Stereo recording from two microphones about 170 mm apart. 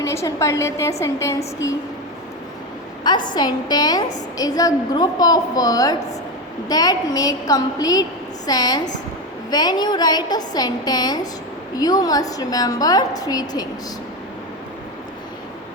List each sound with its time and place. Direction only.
0.0 s a woman's voice: 15° left (ahead or behind)
3.0 s a woman's voice: 25° left (ahead or behind)